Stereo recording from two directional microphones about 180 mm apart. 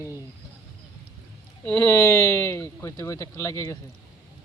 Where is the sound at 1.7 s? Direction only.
15° left (ahead or behind).